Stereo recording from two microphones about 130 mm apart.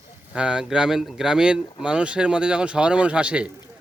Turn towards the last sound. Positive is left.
turn(degrees=-10)  # may be behind; listen again after turning